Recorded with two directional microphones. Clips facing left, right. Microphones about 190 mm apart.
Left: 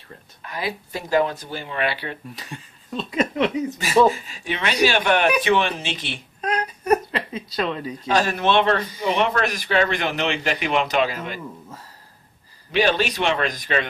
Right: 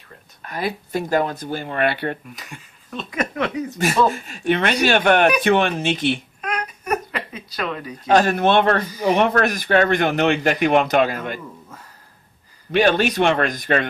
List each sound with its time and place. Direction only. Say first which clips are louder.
0.4 s speech: right 3 dB; 50° right (ahead or behind)
2.3 s speech: left 2 dB; 30° left (ahead or behind)
4.1 s speech: right 8 dB; 55° right (ahead or behind)
6.4 s baby cry: left 3 dB; 35° left (ahead or behind)
8.1 s speech: right 4 dB; 50° right (ahead or behind)
12.7 s speech: right 4 dB; 55° right (ahead or behind)